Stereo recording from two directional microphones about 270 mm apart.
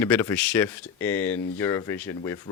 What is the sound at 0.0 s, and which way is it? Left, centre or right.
Speech, centre.